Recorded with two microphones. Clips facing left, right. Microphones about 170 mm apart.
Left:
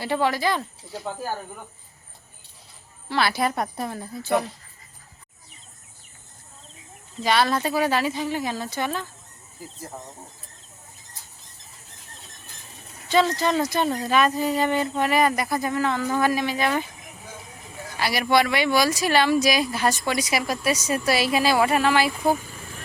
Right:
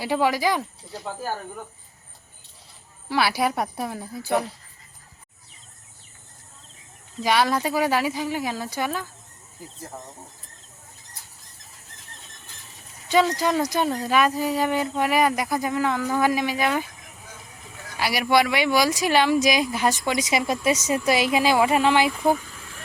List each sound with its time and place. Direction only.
0.0 s speech: 10° right (ahead or behind)
3.1 s speech: 10° right (ahead or behind)
7.2 s speech: 10° right (ahead or behind)
9.6 s speech: 5° left (ahead or behind)
13.1 s speech: 10° right (ahead or behind)
17.9 s speech: 10° right (ahead or behind)